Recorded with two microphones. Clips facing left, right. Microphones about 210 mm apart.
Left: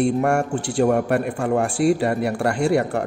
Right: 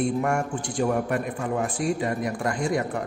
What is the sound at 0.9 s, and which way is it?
Speech, 70° left (ahead or behind).